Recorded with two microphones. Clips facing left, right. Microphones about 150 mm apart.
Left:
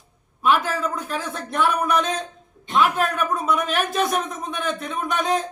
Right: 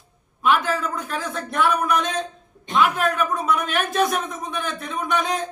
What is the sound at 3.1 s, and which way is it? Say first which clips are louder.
Speech: even; centre (ahead or behind).